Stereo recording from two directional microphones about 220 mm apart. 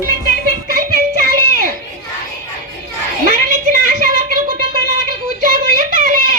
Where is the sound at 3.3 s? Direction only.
40° right (ahead or behind).